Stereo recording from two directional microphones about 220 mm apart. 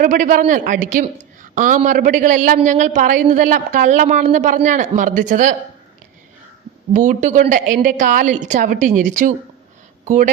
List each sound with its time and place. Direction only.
0.0 s a woman's voice: 35° right (ahead or behind)
6.9 s a woman's voice: 35° right (ahead or behind)